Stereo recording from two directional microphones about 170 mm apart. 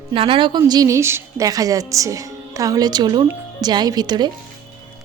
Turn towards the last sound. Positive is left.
turn(degrees=-25)  # may be behind; listen again after turning